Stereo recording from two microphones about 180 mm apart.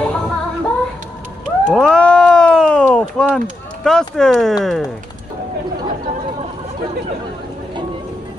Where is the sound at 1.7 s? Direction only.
5° left (ahead or behind).